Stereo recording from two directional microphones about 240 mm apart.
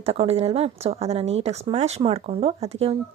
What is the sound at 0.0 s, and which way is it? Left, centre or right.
A woman's voice, right.